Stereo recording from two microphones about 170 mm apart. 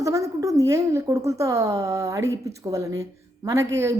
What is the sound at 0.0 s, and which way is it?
A woman's voice, 20° right (ahead or behind).